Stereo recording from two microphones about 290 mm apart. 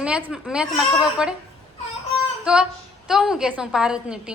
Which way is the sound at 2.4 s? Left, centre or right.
Centre.